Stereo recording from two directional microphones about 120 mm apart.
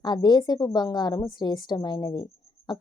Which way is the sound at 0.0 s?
35° left (ahead or behind).